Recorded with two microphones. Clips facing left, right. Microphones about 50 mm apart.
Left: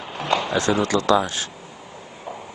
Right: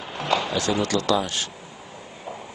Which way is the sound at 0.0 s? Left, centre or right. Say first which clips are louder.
Left 1 dB; centre.